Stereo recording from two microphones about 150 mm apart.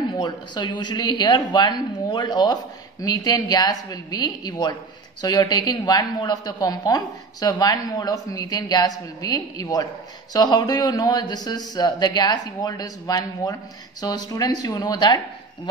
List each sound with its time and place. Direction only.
0.2 s a woman's voice: 30° left (ahead or behind)